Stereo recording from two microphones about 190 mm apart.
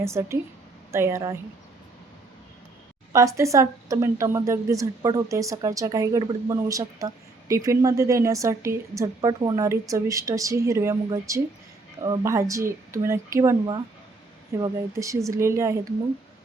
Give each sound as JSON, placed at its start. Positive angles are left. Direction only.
{"t": 0.0, "sound": "speech", "side_deg": -15}
{"t": 3.1, "sound": "speech", "side_deg": -15}